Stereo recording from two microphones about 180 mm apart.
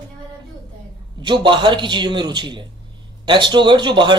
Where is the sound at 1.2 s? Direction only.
25° right (ahead or behind).